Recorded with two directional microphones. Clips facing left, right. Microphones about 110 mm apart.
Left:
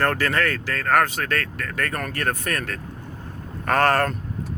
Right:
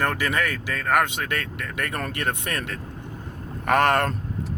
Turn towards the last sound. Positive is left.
turn(degrees=-20)  # may be behind; listen again after turning